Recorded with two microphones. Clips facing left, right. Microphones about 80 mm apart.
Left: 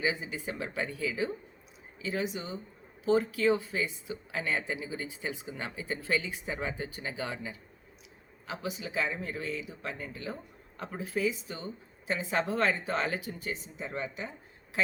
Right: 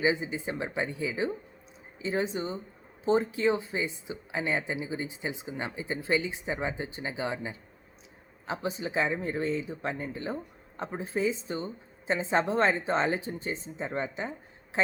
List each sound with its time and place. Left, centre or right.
0.0 s speech: right